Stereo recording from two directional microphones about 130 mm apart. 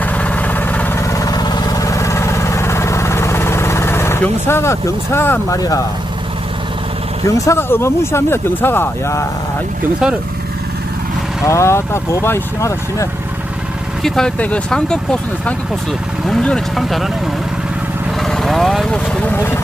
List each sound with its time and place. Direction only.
0.0 s vehicle: 10° left (ahead or behind)
1.1 s vehicle: 25° left (ahead or behind)
5.5 s speech: 30° left (ahead or behind)
7.3 s speech: 25° left (ahead or behind)
11.4 s speech: 20° left (ahead or behind)
14.0 s speech: 5° left (ahead or behind)
16.2 s speech: 5° left (ahead or behind)
18.2 s vehicle: centre (ahead or behind)
19.0 s speech: 15° left (ahead or behind)